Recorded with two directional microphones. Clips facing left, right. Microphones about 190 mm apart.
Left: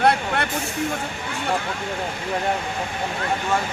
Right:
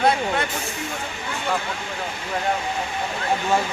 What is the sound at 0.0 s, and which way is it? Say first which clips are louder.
Vehicle: even; 65° left (ahead or behind).